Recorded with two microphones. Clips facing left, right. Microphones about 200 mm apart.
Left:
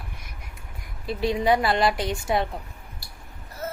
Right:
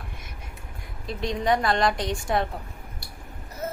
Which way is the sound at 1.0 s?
5° left (ahead or behind).